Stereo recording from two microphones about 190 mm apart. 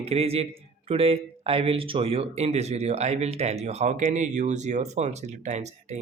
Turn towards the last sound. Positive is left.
turn(degrees=-35)  # may be behind; listen again after turning